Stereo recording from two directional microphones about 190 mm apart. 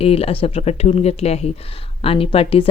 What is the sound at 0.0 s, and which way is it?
Speech, 30° left (ahead or behind).